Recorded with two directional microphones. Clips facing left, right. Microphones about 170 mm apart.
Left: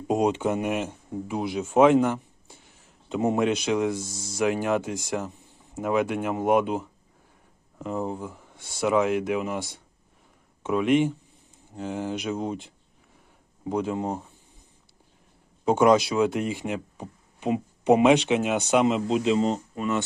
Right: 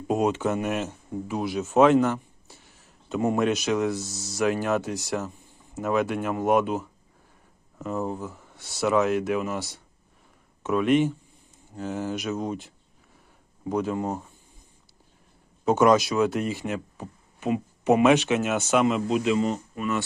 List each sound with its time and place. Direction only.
0.1 s speech: 20° left (ahead or behind)
3.9 s speech: 50° left (ahead or behind)
4.4 s speech: 20° left (ahead or behind)
7.9 s speech: 15° left (ahead or behind)
10.6 s speech: 20° left (ahead or behind)
15.6 s speech: 15° left (ahead or behind)